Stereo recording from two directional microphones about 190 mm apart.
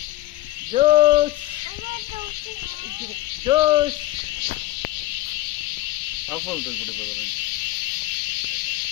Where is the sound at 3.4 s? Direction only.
20° right (ahead or behind).